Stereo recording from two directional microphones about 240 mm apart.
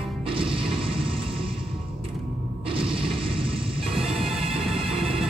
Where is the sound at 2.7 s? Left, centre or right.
Right.